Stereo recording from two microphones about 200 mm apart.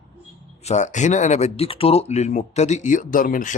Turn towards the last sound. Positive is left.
turn(degrees=40)  # may be behind; listen again after turning